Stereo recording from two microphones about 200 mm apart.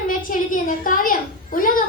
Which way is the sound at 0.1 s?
45° left (ahead or behind).